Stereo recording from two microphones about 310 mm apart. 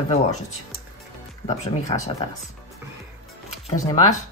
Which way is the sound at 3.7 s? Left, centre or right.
Centre.